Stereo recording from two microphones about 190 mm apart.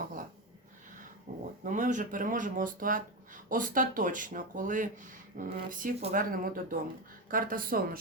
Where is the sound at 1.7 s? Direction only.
45° right (ahead or behind).